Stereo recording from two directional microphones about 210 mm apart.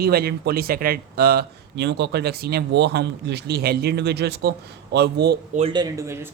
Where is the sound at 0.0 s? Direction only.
45° right (ahead or behind).